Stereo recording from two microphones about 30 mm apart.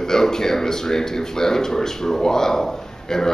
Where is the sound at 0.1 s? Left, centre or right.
Centre.